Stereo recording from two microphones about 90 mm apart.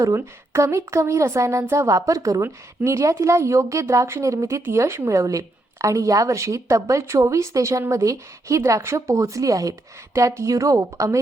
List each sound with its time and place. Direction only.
0.0 s a woman's voice: 35° right (ahead or behind)